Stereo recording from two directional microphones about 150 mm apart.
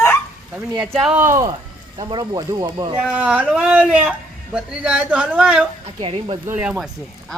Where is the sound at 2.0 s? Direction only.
30° right (ahead or behind).